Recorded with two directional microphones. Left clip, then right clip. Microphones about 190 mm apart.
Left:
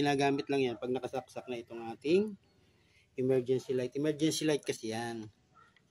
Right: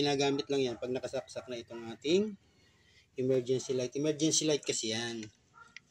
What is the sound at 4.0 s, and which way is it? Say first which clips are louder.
Speech: right 3 dB; centre (ahead or behind).